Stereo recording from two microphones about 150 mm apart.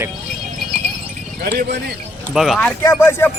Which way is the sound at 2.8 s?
20° left (ahead or behind).